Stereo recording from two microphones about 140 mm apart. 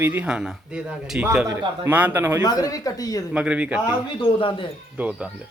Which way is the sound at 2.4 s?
25° left (ahead or behind).